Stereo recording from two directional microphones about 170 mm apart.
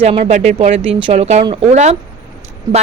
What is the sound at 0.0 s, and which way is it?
Speech, 35° right (ahead or behind).